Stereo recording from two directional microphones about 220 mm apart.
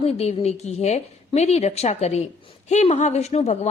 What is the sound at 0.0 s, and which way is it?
A woman's voice, 30° left (ahead or behind).